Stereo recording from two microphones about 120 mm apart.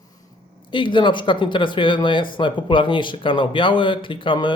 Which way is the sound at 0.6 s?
45° left (ahead or behind).